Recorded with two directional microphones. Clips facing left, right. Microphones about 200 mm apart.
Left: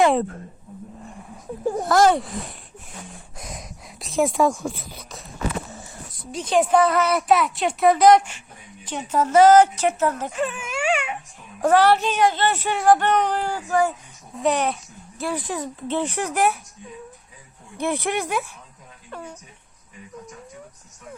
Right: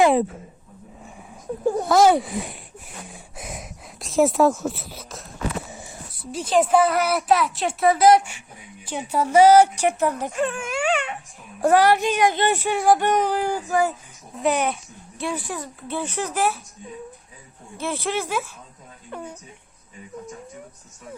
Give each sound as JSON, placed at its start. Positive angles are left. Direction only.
{"t": 0.0, "sound": "speech", "side_deg": -5}
{"t": 1.0, "sound": "a sound", "side_deg": 0}
{"t": 1.7, "sound": "a child's voice", "side_deg": 0}
{"t": 10.4, "sound": "speech", "side_deg": 0}
{"t": 11.6, "sound": "speech", "side_deg": -10}
{"t": 14.4, "sound": "speech", "side_deg": 0}
{"t": 15.4, "sound": "speech", "side_deg": 20}
{"t": 17.7, "sound": "speech", "side_deg": 15}
{"t": 19.1, "sound": "speech", "side_deg": -15}